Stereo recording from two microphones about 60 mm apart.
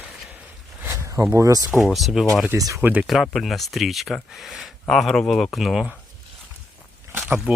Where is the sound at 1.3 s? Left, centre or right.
Right.